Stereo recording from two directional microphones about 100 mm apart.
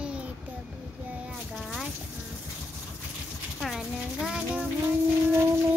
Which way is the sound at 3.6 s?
5° right (ahead or behind).